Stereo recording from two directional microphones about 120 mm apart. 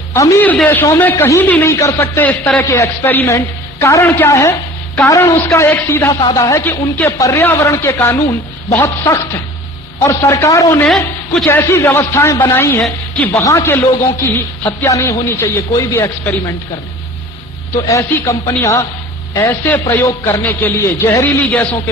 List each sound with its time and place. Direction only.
0.1 s a man's voice: 25° left (ahead or behind)
2.6 s a man's voice: 25° left (ahead or behind)
17.8 s a man's voice: 25° left (ahead or behind)